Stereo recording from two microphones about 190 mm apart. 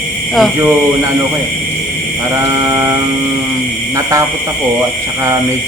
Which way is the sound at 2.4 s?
20° right (ahead or behind).